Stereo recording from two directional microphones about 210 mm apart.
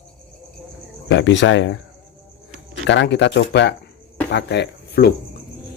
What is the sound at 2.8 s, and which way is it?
Speech, 55° left (ahead or behind).